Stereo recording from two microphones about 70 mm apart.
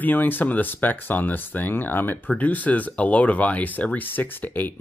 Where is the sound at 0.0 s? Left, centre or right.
Left.